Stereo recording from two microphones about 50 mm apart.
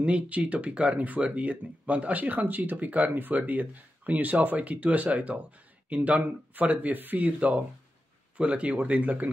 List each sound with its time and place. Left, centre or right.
0.0 s speech: right